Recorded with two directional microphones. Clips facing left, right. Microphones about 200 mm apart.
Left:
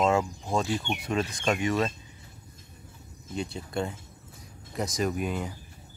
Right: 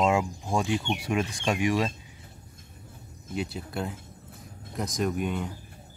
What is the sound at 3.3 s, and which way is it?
Speech, 5° right (ahead or behind).